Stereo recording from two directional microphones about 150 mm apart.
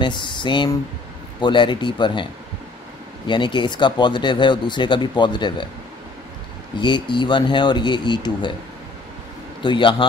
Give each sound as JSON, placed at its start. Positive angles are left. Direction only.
{"t": 0.0, "sound": "speech", "side_deg": 30}
{"t": 3.3, "sound": "speech", "side_deg": 30}
{"t": 6.8, "sound": "speech", "side_deg": 30}
{"t": 9.6, "sound": "speech", "side_deg": 35}